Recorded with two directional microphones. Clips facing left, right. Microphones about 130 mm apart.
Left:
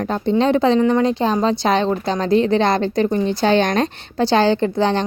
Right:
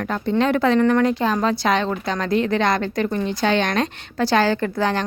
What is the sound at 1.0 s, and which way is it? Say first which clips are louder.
Speech: left 2 dB; 30° left (ahead or behind).